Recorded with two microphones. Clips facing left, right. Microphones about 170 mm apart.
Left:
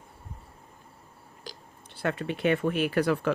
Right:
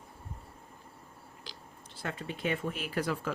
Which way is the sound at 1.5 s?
45° left (ahead or behind).